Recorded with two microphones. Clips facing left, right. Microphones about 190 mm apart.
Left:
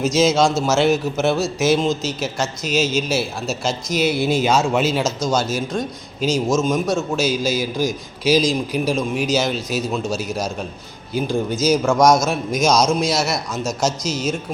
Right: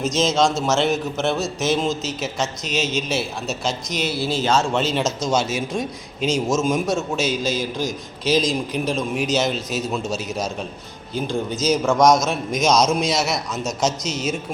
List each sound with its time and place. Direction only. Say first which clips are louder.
0.0 s a man's voice: left 3 dB; centre (ahead or behind)
4.1 s speech: left 1 dB; 15° left (ahead or behind)
5.2 s speech: even; 25° right (ahead or behind)
5.5 s a man's voice: left 1 dB; centre (ahead or behind)
11.6 s a man's voice: left 1 dB; centre (ahead or behind)